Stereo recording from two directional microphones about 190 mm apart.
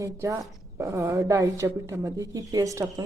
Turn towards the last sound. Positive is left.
turn(degrees=-15)  # may be behind; listen again after turning